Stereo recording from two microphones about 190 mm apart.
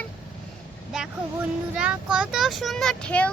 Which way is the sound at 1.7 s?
5° right (ahead or behind).